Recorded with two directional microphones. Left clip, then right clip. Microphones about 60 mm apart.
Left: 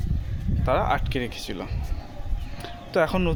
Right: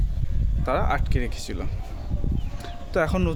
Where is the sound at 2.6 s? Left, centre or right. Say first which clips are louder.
Left 2 dB; centre.